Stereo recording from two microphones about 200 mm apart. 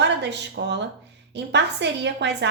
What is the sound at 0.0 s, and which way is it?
A woman's voice, 60° right (ahead or behind).